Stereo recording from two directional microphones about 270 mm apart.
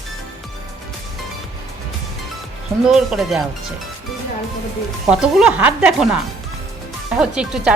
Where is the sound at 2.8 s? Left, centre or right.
Centre.